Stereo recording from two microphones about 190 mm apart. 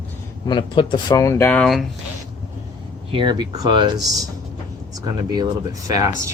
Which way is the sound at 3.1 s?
25° right (ahead or behind).